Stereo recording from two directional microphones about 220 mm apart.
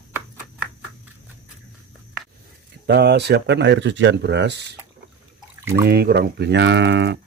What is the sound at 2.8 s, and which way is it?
Speech, 50° right (ahead or behind).